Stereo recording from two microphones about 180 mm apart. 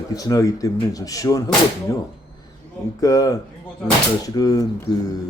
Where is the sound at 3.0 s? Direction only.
20° left (ahead or behind).